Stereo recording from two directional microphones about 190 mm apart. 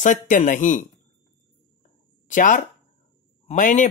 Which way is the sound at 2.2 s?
45° left (ahead or behind).